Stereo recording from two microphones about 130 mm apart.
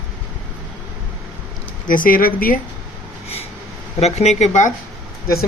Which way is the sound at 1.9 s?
90° left.